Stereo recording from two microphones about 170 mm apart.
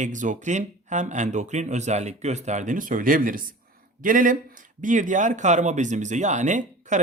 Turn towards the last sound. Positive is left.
turn(degrees=-45)  # may be behind; listen again after turning